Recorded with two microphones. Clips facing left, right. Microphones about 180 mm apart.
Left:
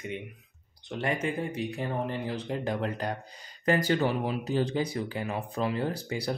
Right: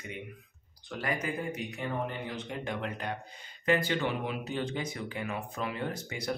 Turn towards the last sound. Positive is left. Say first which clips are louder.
# left 4 dB
turn(degrees=35)  # may be behind; listen again after turning